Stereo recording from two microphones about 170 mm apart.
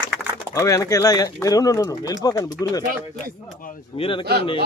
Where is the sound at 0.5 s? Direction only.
20° left (ahead or behind).